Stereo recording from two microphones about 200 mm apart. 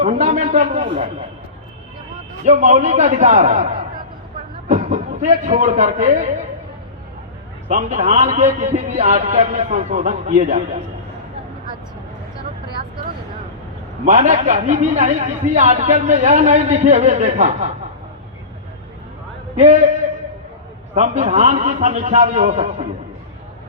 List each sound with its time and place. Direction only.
0.0 s a sound: 35° right (ahead or behind)
2.4 s a man's voice: 35° right (ahead or behind)
7.7 s a man's voice: 40° right (ahead or behind)
14.0 s a man's voice: 35° right (ahead or behind)
19.5 s a man's voice: 35° right (ahead or behind)
20.9 s a man's voice: 35° right (ahead or behind)